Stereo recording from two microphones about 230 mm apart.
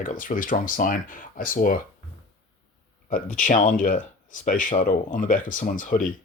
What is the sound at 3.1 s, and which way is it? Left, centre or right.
Speech, left.